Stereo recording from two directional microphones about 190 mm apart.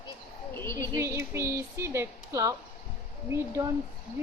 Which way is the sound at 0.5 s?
15° left (ahead or behind).